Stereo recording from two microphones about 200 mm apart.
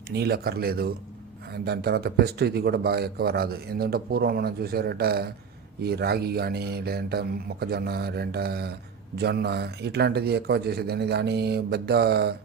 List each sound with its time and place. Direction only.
0.1 s speech: 50° right (ahead or behind)